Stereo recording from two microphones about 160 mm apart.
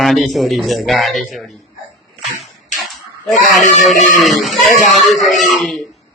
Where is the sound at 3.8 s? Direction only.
Centre (ahead or behind).